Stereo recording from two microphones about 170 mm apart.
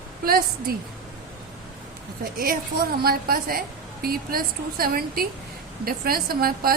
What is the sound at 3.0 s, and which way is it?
A woman's voice, 60° right (ahead or behind).